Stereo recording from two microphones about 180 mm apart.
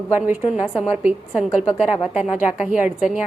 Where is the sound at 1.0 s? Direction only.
5° right (ahead or behind).